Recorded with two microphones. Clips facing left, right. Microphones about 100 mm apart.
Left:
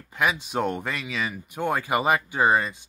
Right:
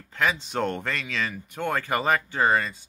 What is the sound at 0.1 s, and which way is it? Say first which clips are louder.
Speech: left 1 dB; 10° left (ahead or behind).